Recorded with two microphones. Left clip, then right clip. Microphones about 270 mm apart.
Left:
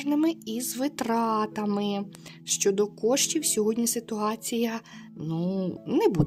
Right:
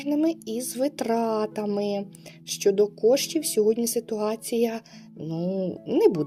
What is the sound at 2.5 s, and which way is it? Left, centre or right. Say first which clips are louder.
Speech: right 3 dB; left.